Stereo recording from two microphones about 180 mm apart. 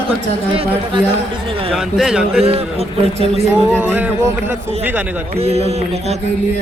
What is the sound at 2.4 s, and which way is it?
A man's voice, 35° right (ahead or behind).